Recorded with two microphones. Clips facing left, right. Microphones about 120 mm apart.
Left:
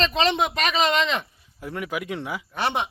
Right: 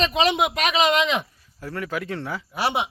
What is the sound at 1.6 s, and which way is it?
Speech, 15° left (ahead or behind).